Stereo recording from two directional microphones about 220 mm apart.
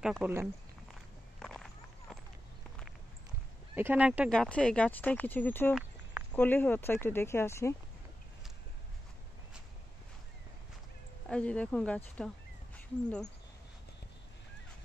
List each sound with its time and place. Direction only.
0.0 s speech: 5° right (ahead or behind)
1.4 s a sound: centre (ahead or behind)
3.7 s speech: 10° right (ahead or behind)
4.3 s speech: 5° left (ahead or behind)
11.2 s speech: 5° left (ahead or behind)